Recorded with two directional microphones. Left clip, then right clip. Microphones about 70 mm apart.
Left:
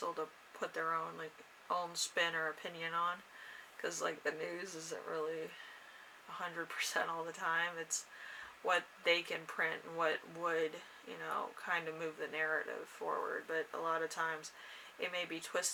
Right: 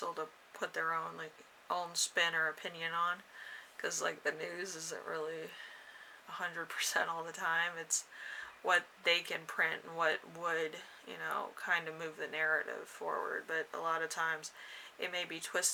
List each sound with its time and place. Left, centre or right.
0.0 s speech: right